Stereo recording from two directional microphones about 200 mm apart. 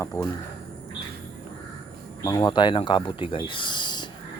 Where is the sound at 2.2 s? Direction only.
20° left (ahead or behind).